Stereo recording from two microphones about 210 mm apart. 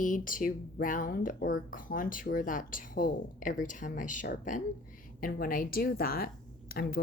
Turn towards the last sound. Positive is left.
turn(degrees=45)  # may be behind; listen again after turning